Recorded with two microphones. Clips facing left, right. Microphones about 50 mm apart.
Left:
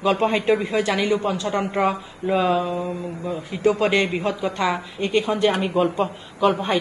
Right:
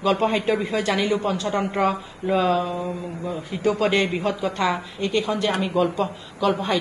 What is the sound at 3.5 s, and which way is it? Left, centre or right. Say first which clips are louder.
A woman's voice: left 2 dB; centre.